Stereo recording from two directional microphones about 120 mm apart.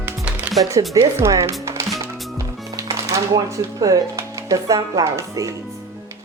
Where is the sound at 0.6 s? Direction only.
25° right (ahead or behind).